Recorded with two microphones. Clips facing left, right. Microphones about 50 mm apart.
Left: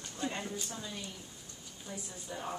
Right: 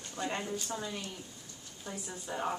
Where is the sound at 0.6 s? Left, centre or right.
Right.